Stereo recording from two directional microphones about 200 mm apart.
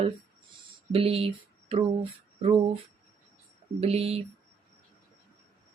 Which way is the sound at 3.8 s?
30° right (ahead or behind).